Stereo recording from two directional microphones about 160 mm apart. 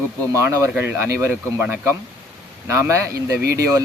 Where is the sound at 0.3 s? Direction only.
20° right (ahead or behind).